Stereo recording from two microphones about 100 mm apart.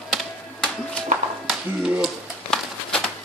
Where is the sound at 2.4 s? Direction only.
5° left (ahead or behind).